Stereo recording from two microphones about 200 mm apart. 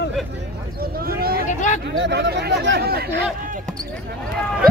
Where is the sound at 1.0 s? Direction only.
50° right (ahead or behind).